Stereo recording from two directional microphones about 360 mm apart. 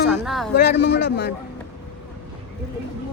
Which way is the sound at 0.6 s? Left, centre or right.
Left.